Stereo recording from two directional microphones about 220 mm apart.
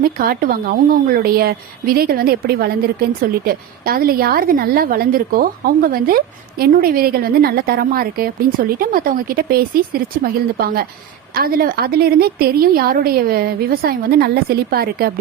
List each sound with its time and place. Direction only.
0.2 s a woman's voice: 40° right (ahead or behind)